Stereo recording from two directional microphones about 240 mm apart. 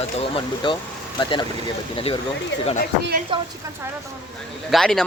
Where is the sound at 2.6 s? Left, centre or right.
Left.